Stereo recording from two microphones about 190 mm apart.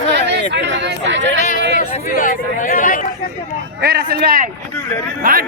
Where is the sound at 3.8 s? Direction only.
55° right (ahead or behind).